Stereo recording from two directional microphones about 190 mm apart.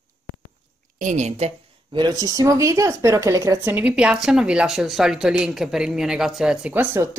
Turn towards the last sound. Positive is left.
turn(degrees=-10)  # may be behind; listen again after turning